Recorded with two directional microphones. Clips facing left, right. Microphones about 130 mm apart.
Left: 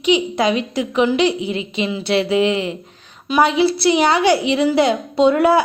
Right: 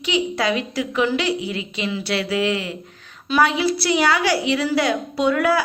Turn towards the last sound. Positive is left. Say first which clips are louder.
# left 5 dB
turn(degrees=25)  # may be behind; listen again after turning